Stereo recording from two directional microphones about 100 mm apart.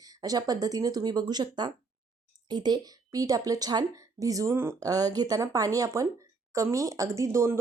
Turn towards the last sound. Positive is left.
turn(degrees=-30)  # may be behind; listen again after turning